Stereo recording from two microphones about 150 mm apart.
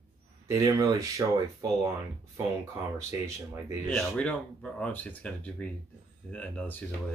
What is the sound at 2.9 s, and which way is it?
Speech, 20° right (ahead or behind).